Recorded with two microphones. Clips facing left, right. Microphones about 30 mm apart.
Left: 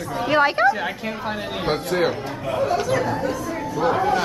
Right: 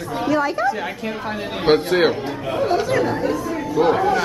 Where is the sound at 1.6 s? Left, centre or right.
Right.